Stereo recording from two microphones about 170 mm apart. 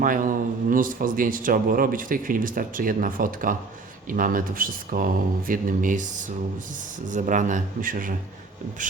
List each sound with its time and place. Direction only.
0.0 s speech: 55° right (ahead or behind)